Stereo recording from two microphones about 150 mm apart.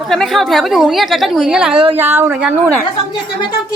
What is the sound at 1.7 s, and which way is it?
Speech, 35° right (ahead or behind).